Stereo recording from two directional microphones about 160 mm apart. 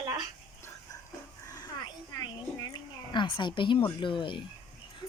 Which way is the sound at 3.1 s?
30° left (ahead or behind).